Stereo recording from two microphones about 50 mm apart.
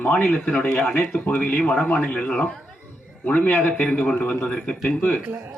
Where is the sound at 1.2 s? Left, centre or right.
Left.